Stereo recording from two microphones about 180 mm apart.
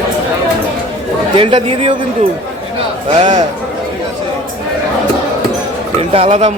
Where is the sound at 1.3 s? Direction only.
30° right (ahead or behind).